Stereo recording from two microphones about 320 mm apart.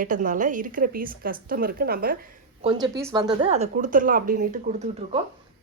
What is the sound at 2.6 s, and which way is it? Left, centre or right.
Speech, centre.